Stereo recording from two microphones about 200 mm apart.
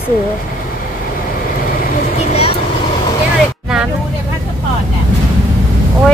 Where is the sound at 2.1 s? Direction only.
30° left (ahead or behind).